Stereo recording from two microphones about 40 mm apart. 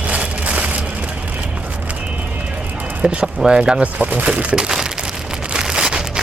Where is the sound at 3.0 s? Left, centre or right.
Right.